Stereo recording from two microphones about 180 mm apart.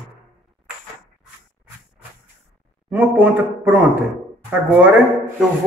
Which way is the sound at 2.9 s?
10° right (ahead or behind).